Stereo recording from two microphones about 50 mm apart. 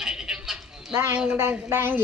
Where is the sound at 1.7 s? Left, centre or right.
Right.